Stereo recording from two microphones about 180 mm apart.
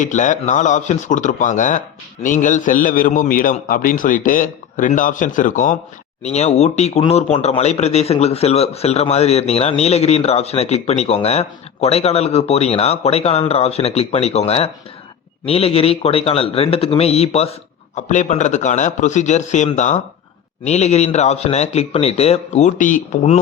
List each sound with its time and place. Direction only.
0.0 s a man's voice: 45° left (ahead or behind)
6.2 s speech: 35° left (ahead or behind)